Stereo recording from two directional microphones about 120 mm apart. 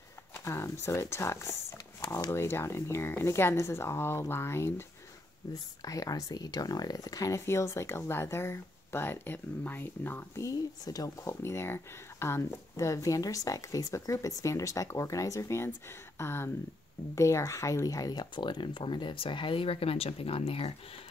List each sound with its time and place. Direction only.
0.5 s speech: 20° left (ahead or behind); by 20.7 s 50° left (ahead or behind)